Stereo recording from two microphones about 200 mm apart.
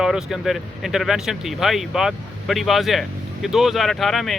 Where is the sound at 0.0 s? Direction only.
Centre (ahead or behind).